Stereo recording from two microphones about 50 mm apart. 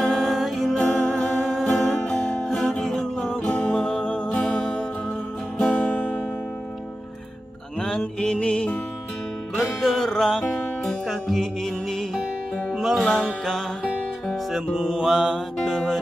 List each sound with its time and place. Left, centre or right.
0.0 s music: centre; by 3.7 s left
3.7 s music: centre
5.7 s music: left
7.8 s music: centre
9.6 s music: centre
12.7 s music: centre
14.8 s mantra: centre
15.6 s music: centre